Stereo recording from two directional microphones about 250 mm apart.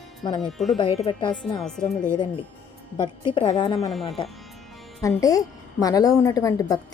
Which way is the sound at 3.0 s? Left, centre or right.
Centre.